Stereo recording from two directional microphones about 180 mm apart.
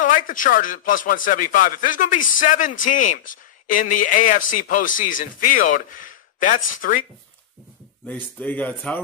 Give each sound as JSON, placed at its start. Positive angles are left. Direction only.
{"t": 0.0, "sound": "a man's voice", "side_deg": 45}
{"t": 8.1, "sound": "speech", "side_deg": 10}